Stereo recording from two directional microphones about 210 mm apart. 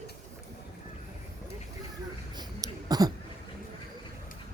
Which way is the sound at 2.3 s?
20° right (ahead or behind).